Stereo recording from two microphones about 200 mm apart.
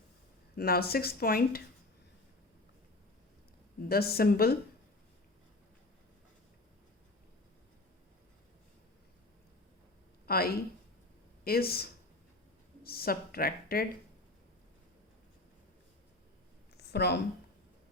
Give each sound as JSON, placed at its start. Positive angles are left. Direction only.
{"t": 0.5, "sound": "speech", "side_deg": 50}
{"t": 3.8, "sound": "speech", "side_deg": 50}
{"t": 10.2, "sound": "speech", "side_deg": 50}
{"t": 16.7, "sound": "a sound", "side_deg": 55}